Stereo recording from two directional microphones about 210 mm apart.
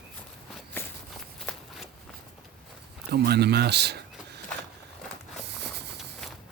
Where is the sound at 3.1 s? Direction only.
50° right (ahead or behind).